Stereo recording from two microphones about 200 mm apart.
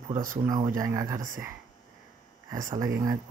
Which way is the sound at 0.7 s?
15° right (ahead or behind).